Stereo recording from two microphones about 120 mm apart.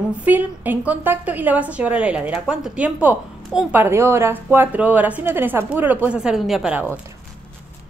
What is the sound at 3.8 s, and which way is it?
Speech, 20° right (ahead or behind).